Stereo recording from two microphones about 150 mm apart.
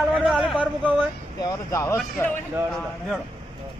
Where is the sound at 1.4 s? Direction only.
20° left (ahead or behind).